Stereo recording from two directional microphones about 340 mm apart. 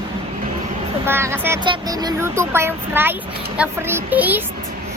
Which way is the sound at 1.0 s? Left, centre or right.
Centre.